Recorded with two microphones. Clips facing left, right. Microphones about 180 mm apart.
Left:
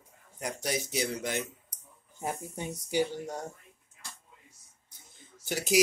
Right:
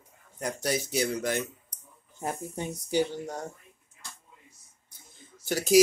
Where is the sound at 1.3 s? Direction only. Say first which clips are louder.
Right 4 dB; 50° right (ahead or behind).